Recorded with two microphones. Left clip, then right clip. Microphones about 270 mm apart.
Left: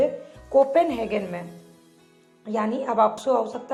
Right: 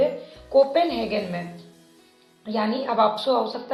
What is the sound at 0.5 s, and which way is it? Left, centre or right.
Speech, left.